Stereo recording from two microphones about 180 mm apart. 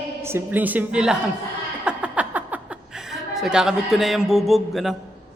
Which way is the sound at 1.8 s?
5° right (ahead or behind).